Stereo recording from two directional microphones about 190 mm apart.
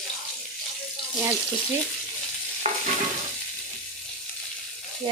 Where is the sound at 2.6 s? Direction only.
30° right (ahead or behind).